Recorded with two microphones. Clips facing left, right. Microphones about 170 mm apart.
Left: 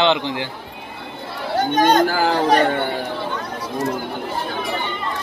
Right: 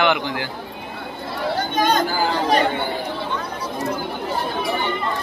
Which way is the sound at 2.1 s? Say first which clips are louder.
Left 3 dB; 65° left (ahead or behind).